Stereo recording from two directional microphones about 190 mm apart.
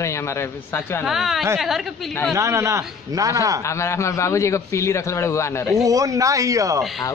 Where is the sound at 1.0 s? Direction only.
Centre (ahead or behind).